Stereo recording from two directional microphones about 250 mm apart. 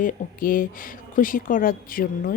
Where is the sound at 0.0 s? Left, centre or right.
Left.